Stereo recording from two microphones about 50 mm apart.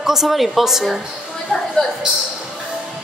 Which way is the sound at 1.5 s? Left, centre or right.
Centre.